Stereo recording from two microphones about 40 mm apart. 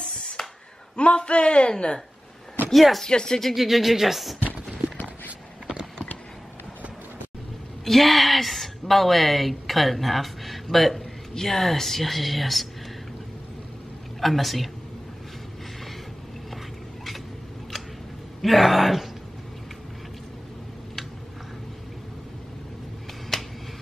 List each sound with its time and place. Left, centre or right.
0.4 s a sound: centre
0.9 s a man's voice: left
2.7 s speech: centre
3.0 s speech: centre
3.5 s speech: centre
7.8 s a woman's voice: centre
14.2 s speech: centre
18.4 s speech: centre
23.3 s finger snapping: centre